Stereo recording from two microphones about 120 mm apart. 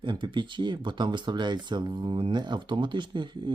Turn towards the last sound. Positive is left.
turn(degrees=-40)  # may be behind; listen again after turning